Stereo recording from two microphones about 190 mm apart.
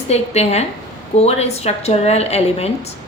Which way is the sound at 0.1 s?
35° left (ahead or behind).